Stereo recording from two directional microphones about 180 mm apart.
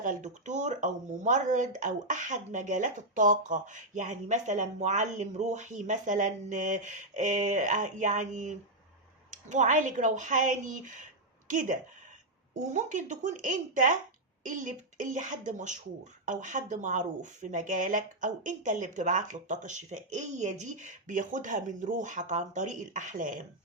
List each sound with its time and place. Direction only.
0.0 s speech: 45° right (ahead or behind)